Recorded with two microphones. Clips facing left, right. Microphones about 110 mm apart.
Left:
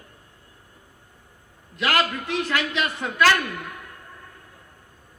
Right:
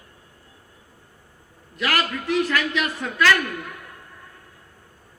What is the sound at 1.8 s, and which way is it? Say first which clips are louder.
A man's voice: left 1 dB; 25° left (ahead or behind).